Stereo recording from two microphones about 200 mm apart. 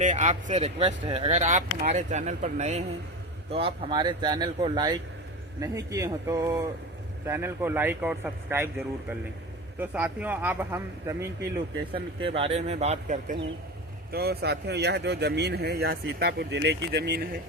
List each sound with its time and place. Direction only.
0.0 s speech: 35° right (ahead or behind); by 11.2 s 10° right (ahead or behind)
11.9 s speech: 25° right (ahead or behind)
14.1 s speech: 50° right (ahead or behind)